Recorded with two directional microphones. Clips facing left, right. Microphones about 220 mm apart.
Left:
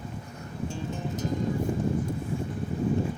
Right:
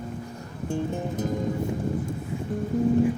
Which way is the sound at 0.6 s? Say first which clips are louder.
Right 6 dB; 55° right (ahead or behind).